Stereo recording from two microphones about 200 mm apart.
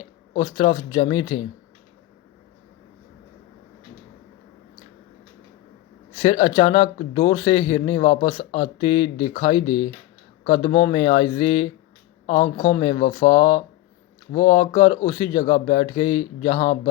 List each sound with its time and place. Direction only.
0.0 s speech: 25° left (ahead or behind)
6.1 s speech: 25° left (ahead or behind)